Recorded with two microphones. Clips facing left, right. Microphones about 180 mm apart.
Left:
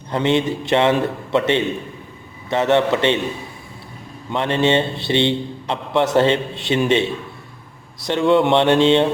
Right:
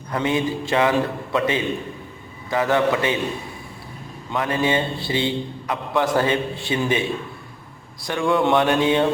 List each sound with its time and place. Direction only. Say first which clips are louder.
0.1 s a man's voice: left 4 dB; 25° left (ahead or behind)
4.3 s a man's voice: left 4 dB; 25° left (ahead or behind)